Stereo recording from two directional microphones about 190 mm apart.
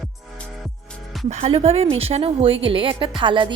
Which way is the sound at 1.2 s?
35° right (ahead or behind).